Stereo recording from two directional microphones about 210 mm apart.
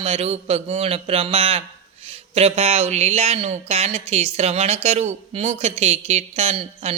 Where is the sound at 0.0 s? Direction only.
30° right (ahead or behind).